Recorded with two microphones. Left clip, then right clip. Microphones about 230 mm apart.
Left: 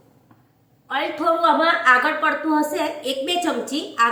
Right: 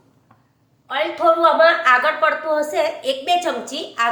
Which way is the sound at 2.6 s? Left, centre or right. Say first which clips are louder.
Right 3 dB; right.